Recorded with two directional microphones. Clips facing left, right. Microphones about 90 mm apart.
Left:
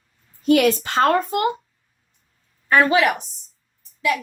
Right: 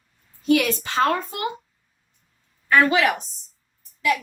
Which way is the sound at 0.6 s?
50° left (ahead or behind).